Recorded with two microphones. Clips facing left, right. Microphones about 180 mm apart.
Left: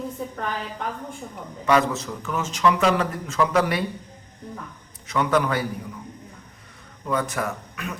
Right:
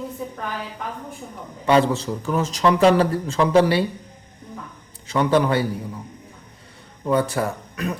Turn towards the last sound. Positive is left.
turn(degrees=-35)  # may be behind; listen again after turning